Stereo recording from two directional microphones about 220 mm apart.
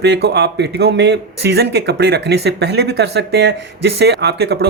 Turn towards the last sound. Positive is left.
turn(degrees=-45)  # may be behind; listen again after turning